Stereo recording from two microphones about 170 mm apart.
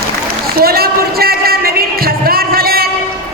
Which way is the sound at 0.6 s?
65° right (ahead or behind).